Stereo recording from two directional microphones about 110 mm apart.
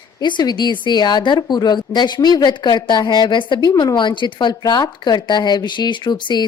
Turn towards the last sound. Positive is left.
turn(degrees=40)  # may be behind; listen again after turning